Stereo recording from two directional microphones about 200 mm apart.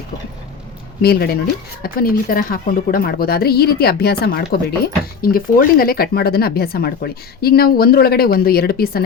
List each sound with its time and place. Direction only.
1.0 s speech: 50° left (ahead or behind)